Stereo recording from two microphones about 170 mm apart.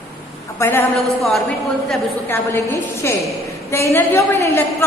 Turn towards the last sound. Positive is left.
turn(degrees=15)  # may be behind; listen again after turning